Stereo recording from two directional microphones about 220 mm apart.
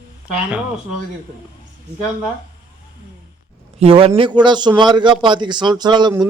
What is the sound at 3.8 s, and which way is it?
A man's voice, 25° right (ahead or behind).